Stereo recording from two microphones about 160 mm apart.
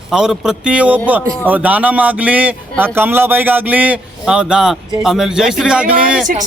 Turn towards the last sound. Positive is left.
turn(degrees=-5)  # may be behind; listen again after turning